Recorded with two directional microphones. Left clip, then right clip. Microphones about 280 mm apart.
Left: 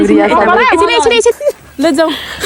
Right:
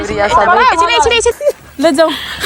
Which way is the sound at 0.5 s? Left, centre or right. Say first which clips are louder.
Even; right.